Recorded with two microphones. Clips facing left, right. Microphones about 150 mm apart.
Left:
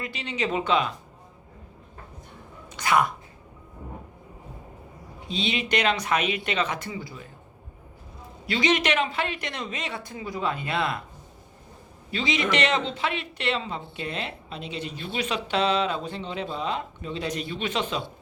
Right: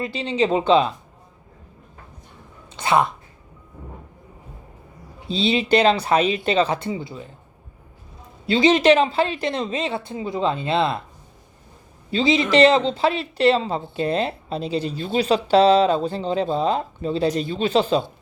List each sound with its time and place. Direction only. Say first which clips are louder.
0.0 s speech: right 8 dB; 30° right (ahead or behind)
2.7 s a woman's voice: right 4 dB; 25° right (ahead or behind)
5.3 s speech: right 8 dB; 30° right (ahead or behind)
8.4 s speech: right 9 dB; 30° right (ahead or behind)
12.1 s speech: right 8 dB; 30° right (ahead or behind)